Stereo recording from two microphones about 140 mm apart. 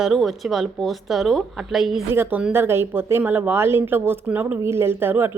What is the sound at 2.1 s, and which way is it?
Speech, 15° right (ahead or behind).